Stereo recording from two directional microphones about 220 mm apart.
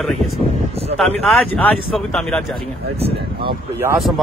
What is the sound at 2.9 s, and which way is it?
Speech, 25° right (ahead or behind).